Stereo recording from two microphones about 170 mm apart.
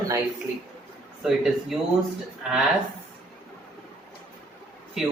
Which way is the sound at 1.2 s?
Centre (ahead or behind).